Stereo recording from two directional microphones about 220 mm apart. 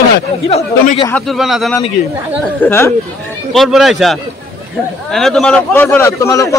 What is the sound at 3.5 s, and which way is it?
A man's voice, centre (ahead or behind).